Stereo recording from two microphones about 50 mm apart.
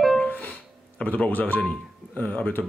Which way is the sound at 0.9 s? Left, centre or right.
Left.